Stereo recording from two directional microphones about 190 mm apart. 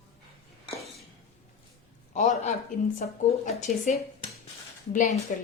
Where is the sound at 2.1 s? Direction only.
40° left (ahead or behind).